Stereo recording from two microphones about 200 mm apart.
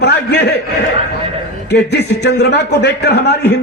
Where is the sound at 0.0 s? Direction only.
55° left (ahead or behind).